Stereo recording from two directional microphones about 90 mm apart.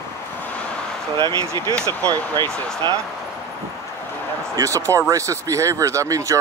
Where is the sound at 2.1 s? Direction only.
25° left (ahead or behind).